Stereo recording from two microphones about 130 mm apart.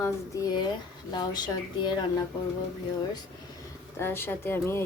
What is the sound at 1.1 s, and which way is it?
Speech, 35° left (ahead or behind).